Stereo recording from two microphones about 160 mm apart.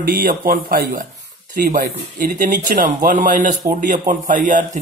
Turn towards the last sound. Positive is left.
turn(degrees=-50)  # may be behind; listen again after turning